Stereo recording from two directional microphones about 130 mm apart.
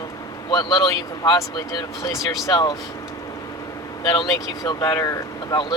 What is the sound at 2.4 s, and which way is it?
Speech, 30° left (ahead or behind).